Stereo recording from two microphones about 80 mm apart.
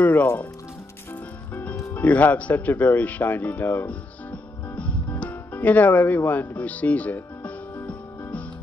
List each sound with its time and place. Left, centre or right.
0.0 s speech: left
1.5 s music: centre